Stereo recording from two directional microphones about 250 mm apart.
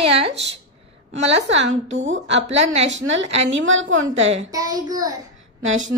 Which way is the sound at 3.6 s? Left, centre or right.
Right.